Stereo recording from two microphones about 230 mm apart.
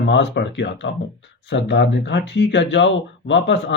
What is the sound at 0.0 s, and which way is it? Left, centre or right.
Speech, left.